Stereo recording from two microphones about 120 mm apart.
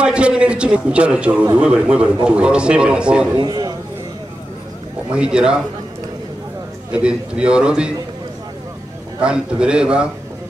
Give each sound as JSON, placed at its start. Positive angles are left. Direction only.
{"t": 0.0, "sound": "a man's voice", "side_deg": -10}
{"t": 3.3, "sound": "a man's voice", "side_deg": -35}
{"t": 5.1, "sound": "a man's voice", "side_deg": -10}
{"t": 6.9, "sound": "a man's voice", "side_deg": -10}
{"t": 9.2, "sound": "a man's voice", "side_deg": -10}